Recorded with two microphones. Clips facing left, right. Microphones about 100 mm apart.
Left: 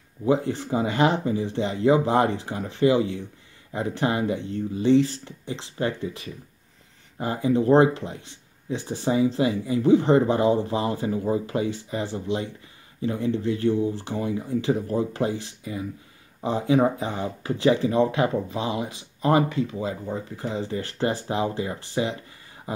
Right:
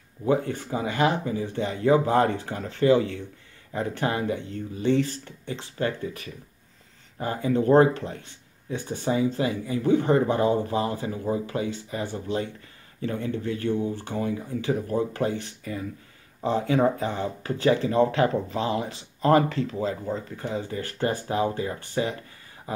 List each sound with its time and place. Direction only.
0.3 s speech: 25° left (ahead or behind)
16.3 s a sound: 10° left (ahead or behind)
17.0 s speech: 15° left (ahead or behind)
20.2 s speech: 20° left (ahead or behind)